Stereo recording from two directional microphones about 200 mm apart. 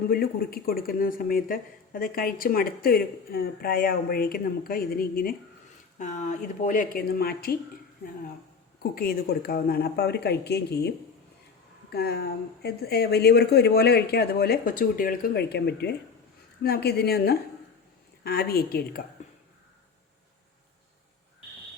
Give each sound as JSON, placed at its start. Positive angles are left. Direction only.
{"t": 0.1, "sound": "speech", "side_deg": 45}
{"t": 8.8, "sound": "speech", "side_deg": 50}